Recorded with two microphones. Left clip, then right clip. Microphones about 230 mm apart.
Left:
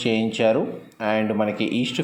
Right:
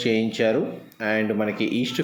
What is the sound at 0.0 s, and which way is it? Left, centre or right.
Speech, centre.